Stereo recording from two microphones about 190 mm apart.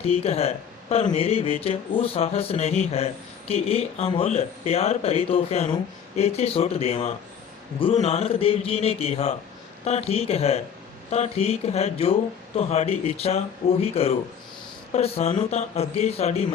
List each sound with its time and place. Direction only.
0.0 s speech: 30° left (ahead or behind)